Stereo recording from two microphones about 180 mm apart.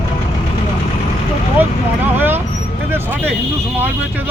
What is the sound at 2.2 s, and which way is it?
Vehicle, 10° right (ahead or behind).